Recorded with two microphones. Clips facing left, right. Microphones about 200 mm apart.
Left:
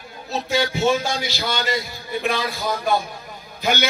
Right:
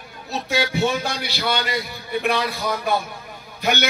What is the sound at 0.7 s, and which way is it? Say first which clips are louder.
A man's voice: left 2 dB; 60° right (ahead or behind).